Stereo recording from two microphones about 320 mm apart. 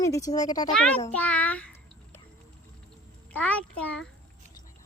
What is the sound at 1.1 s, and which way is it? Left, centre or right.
Child singing, centre.